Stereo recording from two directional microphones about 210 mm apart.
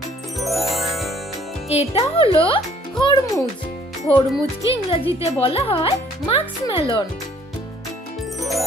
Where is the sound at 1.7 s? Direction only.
30° left (ahead or behind).